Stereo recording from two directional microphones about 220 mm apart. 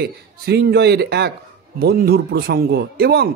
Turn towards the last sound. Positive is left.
turn(degrees=-45)  # may be behind; listen again after turning